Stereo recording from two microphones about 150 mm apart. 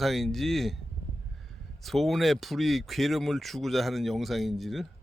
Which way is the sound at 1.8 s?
Centre (ahead or behind).